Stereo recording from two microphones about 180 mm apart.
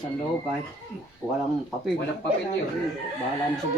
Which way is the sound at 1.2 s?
10° left (ahead or behind).